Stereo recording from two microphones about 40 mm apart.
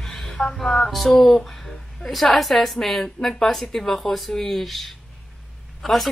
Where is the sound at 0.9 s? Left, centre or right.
Centre.